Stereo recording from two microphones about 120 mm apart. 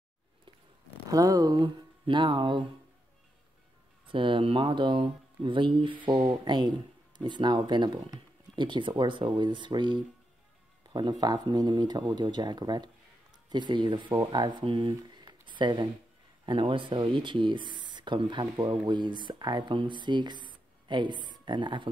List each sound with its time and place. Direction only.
1.1 s speech: 30° right (ahead or behind)
4.1 s speech: 45° right (ahead or behind)